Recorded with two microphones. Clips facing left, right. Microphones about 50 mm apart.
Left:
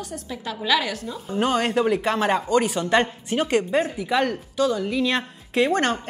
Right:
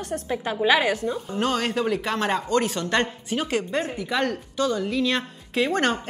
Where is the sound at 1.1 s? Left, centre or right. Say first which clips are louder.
Left 2 dB; centre.